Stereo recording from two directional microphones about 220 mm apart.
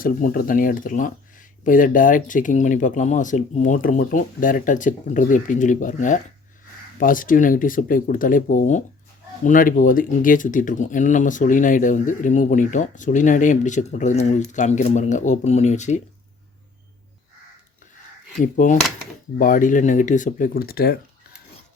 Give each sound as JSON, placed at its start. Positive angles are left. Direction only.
{"t": 0.0, "sound": "speech", "side_deg": 40}
{"t": 18.3, "sound": "speech", "side_deg": 35}